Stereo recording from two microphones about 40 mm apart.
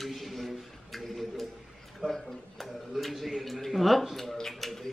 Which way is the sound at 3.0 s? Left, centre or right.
Centre.